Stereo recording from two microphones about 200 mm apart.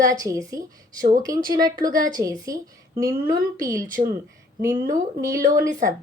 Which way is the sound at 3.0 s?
45° right (ahead or behind).